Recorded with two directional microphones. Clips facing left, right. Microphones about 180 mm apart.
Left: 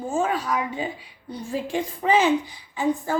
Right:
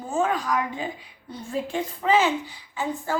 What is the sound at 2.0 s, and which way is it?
A woman's voice, 15° left (ahead or behind).